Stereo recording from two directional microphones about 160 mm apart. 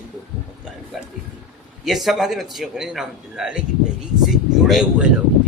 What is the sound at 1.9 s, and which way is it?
A man's voice, centre (ahead or behind).